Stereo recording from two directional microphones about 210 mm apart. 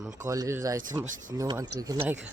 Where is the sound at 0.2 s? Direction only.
15° right (ahead or behind).